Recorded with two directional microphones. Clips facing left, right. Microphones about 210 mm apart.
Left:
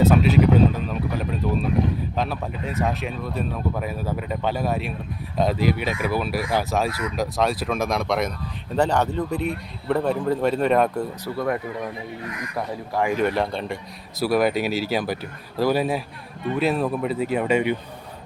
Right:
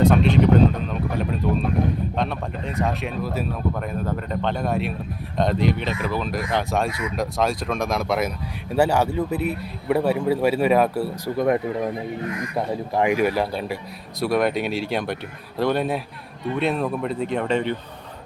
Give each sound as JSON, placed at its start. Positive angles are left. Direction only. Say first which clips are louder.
{"t": 0.0, "sound": "a sound", "louder": "even", "side_deg": 5}
{"t": 2.1, "sound": "speech", "louder": "right 1 dB", "side_deg": 5}
{"t": 11.3, "sound": "speech", "louder": "right 5 dB", "side_deg": -20}
{"t": 13.1, "sound": "speech", "louder": "right 1 dB", "side_deg": -5}